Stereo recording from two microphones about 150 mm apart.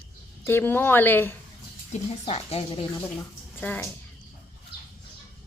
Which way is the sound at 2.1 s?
40° left (ahead or behind).